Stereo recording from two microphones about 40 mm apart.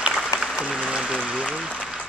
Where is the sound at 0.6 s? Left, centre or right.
Right.